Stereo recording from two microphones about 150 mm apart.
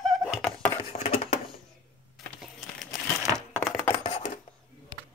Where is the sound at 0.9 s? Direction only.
45° left (ahead or behind).